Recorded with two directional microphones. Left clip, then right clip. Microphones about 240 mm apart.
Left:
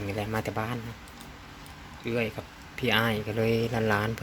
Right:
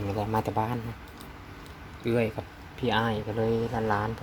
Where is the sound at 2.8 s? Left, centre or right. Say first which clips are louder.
Left 1 dB; centre.